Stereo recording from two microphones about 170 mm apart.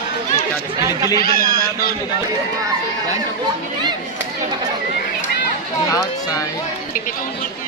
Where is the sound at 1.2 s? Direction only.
60° left (ahead or behind).